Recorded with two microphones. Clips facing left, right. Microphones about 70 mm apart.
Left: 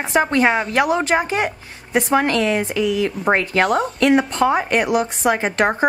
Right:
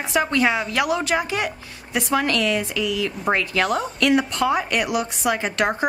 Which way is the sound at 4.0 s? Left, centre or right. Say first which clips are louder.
Left 3 dB; left.